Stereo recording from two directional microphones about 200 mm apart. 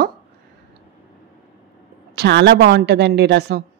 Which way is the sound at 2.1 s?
55° right (ahead or behind).